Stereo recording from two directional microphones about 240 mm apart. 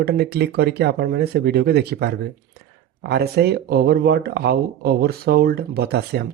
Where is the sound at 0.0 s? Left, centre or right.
Right.